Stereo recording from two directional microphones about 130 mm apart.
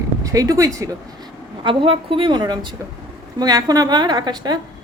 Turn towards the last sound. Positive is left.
turn(degrees=-30)  # may be behind; listen again after turning